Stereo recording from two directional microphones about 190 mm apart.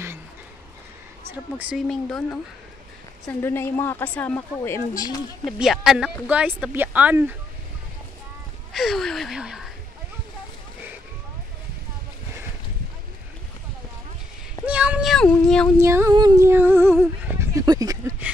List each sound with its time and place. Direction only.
1.6 s speech: 5° right (ahead or behind)
3.3 s a woman's voice: 15° left (ahead or behind)
5.4 s speech: centre (ahead or behind)
8.7 s speech: centre (ahead or behind)
14.7 s a sound: 5° right (ahead or behind)
15.8 s a sound: 15° right (ahead or behind)